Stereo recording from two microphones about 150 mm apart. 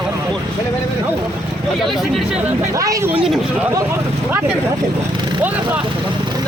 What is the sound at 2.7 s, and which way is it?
Speech, 20° right (ahead or behind).